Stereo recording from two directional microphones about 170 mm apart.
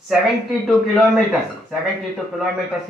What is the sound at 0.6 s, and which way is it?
Speech, centre (ahead or behind).